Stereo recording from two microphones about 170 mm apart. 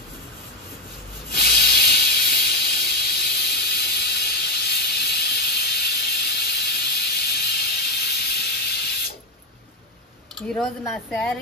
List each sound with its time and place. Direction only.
1.3 s sanding: 70° left (ahead or behind)
3.2 s steam: 70° left (ahead or behind)
10.9 s speech: 5° left (ahead or behind)